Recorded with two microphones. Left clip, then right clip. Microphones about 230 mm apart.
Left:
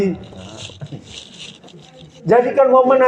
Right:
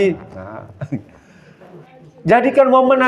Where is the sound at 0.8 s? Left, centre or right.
Right.